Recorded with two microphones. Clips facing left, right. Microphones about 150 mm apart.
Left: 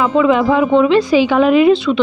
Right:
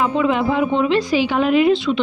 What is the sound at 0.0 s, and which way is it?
Speech, 90° left.